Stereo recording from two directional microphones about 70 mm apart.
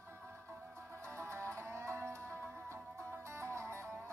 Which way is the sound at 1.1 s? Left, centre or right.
Right.